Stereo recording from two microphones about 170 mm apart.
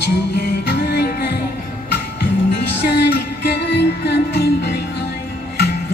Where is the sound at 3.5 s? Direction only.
80° left.